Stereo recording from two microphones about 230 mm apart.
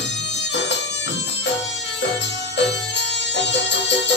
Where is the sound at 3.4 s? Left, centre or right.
Left.